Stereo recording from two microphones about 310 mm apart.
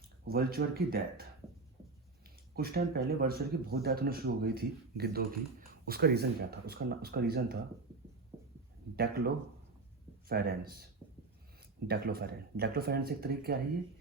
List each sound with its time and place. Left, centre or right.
0.3 s speech: right
9.0 s speech: right
11.9 s speech: right